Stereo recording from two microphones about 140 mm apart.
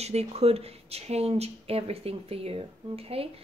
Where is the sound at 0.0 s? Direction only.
50° right (ahead or behind).